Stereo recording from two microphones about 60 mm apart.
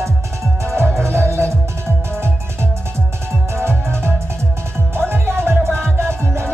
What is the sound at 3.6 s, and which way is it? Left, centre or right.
Music, right.